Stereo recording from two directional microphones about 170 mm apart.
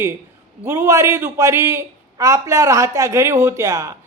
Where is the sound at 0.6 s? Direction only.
15° right (ahead or behind).